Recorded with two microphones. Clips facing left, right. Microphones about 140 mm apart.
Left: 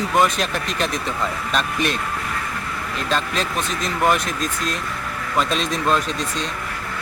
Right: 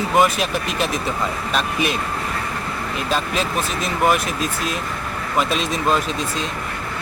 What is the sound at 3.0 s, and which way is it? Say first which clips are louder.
Speech: right 1 dB; 5° right (ahead or behind).